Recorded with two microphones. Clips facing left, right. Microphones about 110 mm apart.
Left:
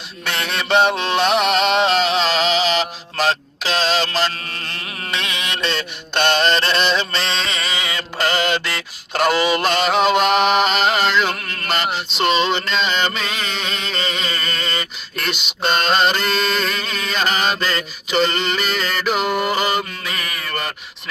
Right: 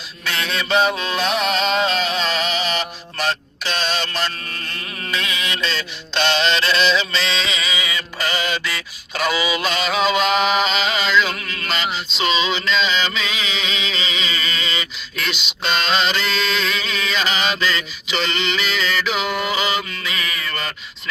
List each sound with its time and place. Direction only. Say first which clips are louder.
0.3 s mantra: left 1 dB; 65° left (ahead or behind)
0.7 s music: left 3 dB; 70° left (ahead or behind); by 4.3 s 90° left
4.3 s a sound: left 1 dB; 40° left (ahead or behind)
5.1 s mantra: even; 70° left (ahead or behind); by 20.5 s 55° left (ahead or behind)